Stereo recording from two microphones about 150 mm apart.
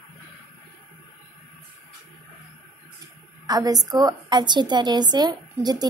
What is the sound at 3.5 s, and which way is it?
A woman's voice, 25° right (ahead or behind).